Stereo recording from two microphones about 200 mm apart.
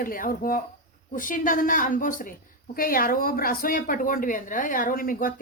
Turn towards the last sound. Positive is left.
turn(degrees=45)  # may be behind; listen again after turning